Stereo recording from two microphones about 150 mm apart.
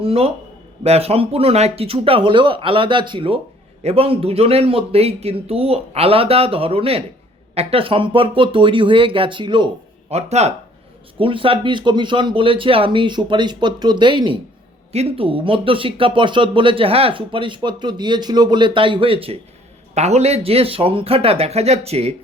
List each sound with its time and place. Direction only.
0.0 s speech: 40° right (ahead or behind)
10.1 s speech: 45° right (ahead or behind)
11.2 s speech: 35° right (ahead or behind)